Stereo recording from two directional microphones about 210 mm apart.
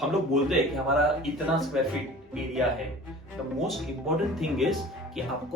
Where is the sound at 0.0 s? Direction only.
Centre (ahead or behind).